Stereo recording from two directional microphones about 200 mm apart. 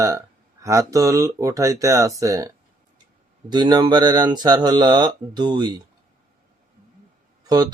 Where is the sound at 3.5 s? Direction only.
20° right (ahead or behind).